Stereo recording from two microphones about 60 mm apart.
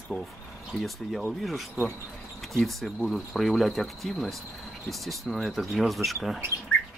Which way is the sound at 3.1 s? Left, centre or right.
Centre.